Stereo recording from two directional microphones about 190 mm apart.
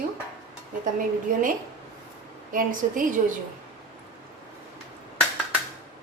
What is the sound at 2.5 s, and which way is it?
Speech, 45° right (ahead or behind).